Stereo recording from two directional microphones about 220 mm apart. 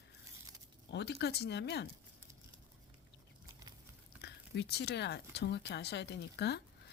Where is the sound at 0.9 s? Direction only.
50° left (ahead or behind).